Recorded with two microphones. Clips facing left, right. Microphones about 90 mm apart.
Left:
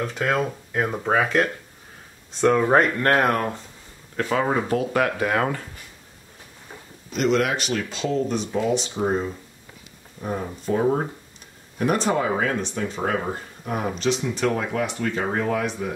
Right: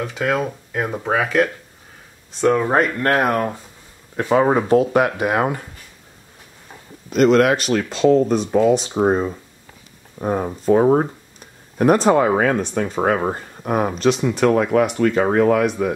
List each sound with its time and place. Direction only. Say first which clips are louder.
0.0 s speech: right 2 dB; 5° right (ahead or behind)
4.2 s speech: right 6 dB; 25° right (ahead or behind)
7.1 s speech: right 7 dB; 45° right (ahead or behind); by 15.9 s 65° right (ahead or behind)